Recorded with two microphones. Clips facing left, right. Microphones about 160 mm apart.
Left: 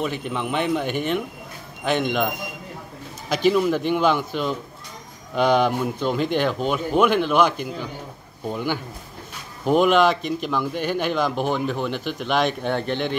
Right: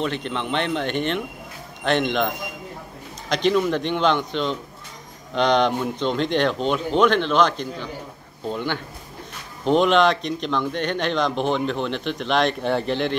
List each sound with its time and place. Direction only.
0.0 s speech: 10° left (ahead or behind)